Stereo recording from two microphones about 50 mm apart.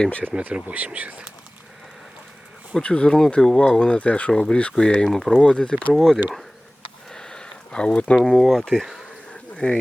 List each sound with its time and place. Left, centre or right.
0.3 s speech: right
2.7 s speech: centre
5.0 s speech: centre
5.4 s speech: centre
5.9 s speech: centre
7.1 s a sound: centre
8.2 s speech: centre
8.8 s speech: centre
9.6 s speech: left